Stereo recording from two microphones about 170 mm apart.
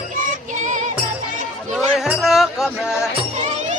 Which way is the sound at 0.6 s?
45° right (ahead or behind).